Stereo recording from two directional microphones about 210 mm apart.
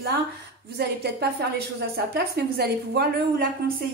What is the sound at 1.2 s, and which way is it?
Speech, 50° right (ahead or behind).